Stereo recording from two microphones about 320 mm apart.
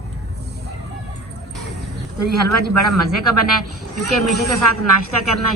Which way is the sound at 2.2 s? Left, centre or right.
Left.